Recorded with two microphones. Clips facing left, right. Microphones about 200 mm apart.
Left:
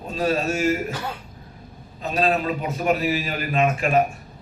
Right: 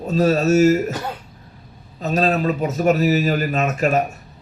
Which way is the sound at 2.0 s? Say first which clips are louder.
Right 3 dB; 40° right (ahead or behind).